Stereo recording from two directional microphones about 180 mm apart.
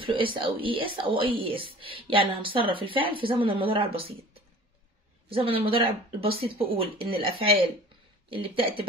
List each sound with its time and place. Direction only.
0.0 s speech: 30° right (ahead or behind)